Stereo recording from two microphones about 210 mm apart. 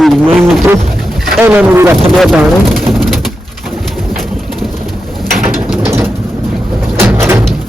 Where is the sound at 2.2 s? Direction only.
Centre (ahead or behind).